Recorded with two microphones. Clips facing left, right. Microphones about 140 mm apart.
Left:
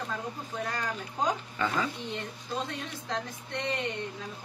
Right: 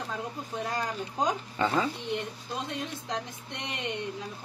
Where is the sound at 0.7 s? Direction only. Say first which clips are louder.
Right 3 dB; 25° right (ahead or behind).